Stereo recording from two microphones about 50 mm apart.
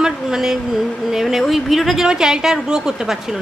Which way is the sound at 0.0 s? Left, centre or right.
Centre.